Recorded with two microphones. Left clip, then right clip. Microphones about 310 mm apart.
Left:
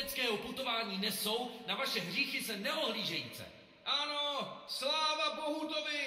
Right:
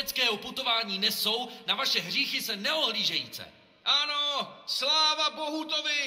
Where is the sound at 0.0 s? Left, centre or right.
Right.